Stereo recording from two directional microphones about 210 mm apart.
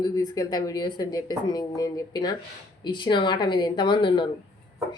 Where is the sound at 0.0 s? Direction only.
20° left (ahead or behind).